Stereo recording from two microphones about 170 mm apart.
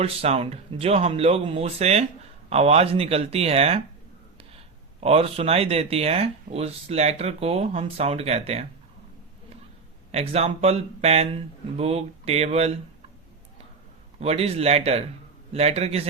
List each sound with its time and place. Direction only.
0.0 s speech: 35° right (ahead or behind)
10.1 s speech: 40° right (ahead or behind)
14.2 s speech: 35° right (ahead or behind)